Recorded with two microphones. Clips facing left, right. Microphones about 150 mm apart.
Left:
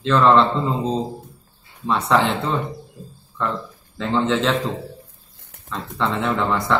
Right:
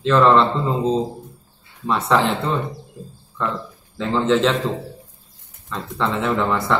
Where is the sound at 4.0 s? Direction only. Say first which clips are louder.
Right 2 dB; centre (ahead or behind).